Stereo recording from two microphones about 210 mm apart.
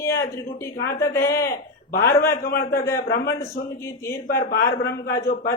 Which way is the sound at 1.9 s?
45° left (ahead or behind).